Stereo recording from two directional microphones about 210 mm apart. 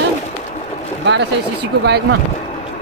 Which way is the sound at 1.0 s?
55° right (ahead or behind).